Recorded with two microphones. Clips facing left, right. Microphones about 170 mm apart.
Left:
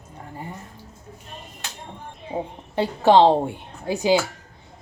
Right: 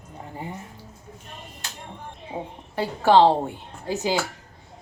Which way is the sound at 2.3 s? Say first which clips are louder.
Left 5 dB; 10° left (ahead or behind).